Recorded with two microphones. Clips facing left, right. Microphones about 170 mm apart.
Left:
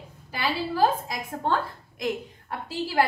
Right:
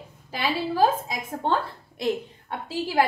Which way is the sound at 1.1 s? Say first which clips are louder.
Right 1 dB; 30° right (ahead or behind).